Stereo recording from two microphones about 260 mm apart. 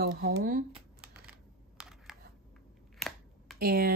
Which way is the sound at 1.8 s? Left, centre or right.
Centre.